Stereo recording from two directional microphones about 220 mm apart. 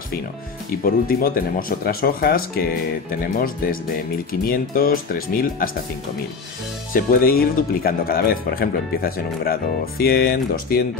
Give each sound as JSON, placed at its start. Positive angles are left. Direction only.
{"t": 0.8, "sound": "speech", "side_deg": 40}
{"t": 6.9, "sound": "speech", "side_deg": 40}